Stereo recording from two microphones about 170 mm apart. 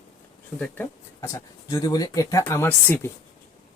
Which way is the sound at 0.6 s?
15° left (ahead or behind).